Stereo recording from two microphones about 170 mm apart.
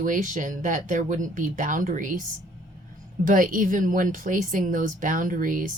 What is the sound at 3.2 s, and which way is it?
Speech, 50° right (ahead or behind).